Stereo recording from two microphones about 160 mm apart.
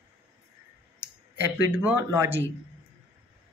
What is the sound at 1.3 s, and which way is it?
Speech, 10° right (ahead or behind).